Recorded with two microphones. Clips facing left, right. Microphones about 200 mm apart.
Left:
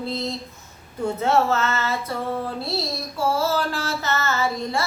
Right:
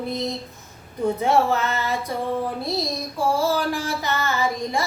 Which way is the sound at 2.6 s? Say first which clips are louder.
Right 2 dB; 15° right (ahead or behind).